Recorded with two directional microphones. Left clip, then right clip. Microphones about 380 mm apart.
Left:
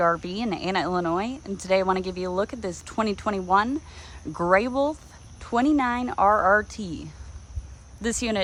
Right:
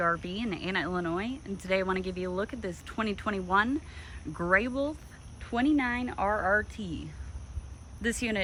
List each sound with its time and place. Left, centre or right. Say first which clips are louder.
0.0 s speech: left 6 dB; centre